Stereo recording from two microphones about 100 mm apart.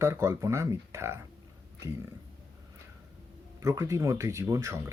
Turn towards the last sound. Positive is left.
turn(degrees=-25)  # may be behind; listen again after turning